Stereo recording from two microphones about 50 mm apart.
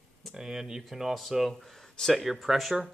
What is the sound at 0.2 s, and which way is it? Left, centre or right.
Speech, centre.